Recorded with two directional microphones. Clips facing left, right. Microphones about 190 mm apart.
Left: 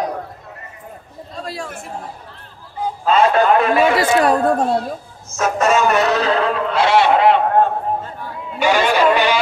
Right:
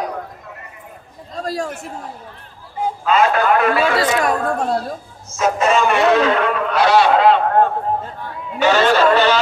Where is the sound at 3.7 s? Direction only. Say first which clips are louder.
Left 2 dB; 20° left (ahead or behind).